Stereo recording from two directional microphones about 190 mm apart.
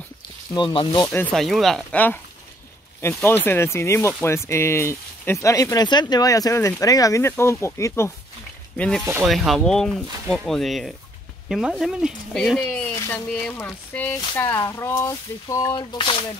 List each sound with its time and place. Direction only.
0.6 s speech: 25° left (ahead or behind)
1.1 s speech: 5° left (ahead or behind); by 16.3 s 25° left (ahead or behind)